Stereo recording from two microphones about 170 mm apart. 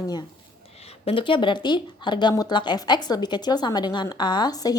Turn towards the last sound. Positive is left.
turn(degrees=20)  # may be behind; listen again after turning